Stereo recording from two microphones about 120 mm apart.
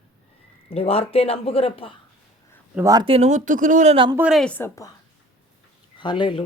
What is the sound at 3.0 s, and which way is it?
Speech, 60° right (ahead or behind).